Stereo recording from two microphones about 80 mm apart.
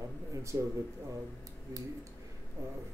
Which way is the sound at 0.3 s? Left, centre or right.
Right.